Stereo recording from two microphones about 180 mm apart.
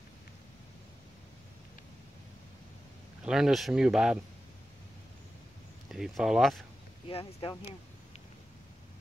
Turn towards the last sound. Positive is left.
turn(degrees=30)  # may be behind; listen again after turning